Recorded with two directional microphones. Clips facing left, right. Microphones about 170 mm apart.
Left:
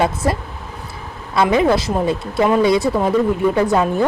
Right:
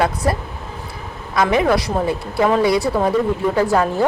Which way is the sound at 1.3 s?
25° left (ahead or behind).